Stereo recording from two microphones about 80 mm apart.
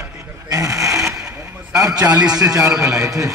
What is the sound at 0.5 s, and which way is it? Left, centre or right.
Sewing machine, right.